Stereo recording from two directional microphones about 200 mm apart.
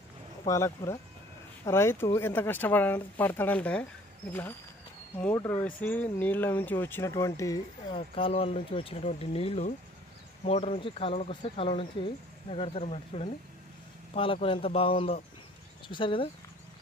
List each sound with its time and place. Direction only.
0.5 s speech: 15° left (ahead or behind)